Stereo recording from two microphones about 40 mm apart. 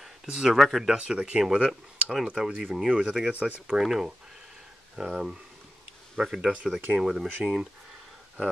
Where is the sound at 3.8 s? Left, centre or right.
Centre.